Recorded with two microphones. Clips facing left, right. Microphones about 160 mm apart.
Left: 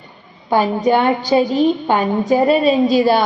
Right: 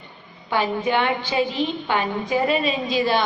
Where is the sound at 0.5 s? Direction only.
40° left (ahead or behind).